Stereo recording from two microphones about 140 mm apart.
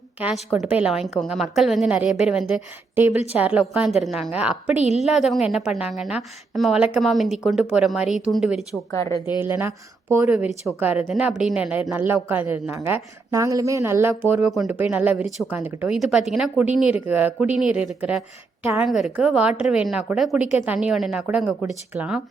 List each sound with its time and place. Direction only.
0.2 s a woman's voice: 5° right (ahead or behind)
8.9 s speech: 20° left (ahead or behind)
9.4 s speech: 15° right (ahead or behind)
18.9 s a woman's voice: centre (ahead or behind)